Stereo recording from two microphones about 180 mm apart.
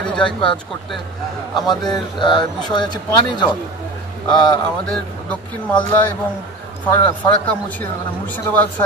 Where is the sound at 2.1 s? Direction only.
25° left (ahead or behind).